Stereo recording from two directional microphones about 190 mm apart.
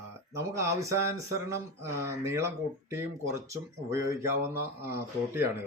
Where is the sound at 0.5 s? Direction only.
15° right (ahead or behind).